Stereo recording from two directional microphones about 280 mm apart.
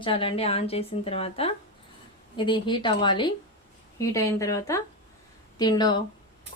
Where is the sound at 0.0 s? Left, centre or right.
Centre.